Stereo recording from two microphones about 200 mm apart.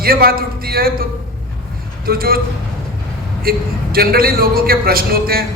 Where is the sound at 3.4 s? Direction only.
50° right (ahead or behind).